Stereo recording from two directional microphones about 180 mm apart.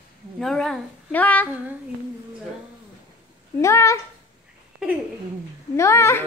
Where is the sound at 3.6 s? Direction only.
15° left (ahead or behind).